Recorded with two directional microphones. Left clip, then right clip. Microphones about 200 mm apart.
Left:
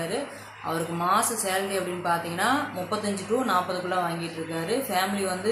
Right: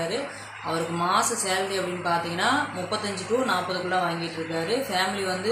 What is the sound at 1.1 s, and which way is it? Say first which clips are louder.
Speech: even; 15° left (ahead or behind).